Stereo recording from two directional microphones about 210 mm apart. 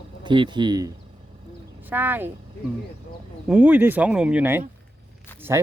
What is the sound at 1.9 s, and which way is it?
Speech, 10° right (ahead or behind).